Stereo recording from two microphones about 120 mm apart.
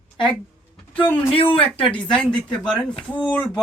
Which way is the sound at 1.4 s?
50° left (ahead or behind).